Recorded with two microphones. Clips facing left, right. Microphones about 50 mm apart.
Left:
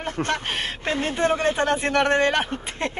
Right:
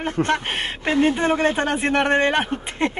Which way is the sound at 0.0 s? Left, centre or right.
Right.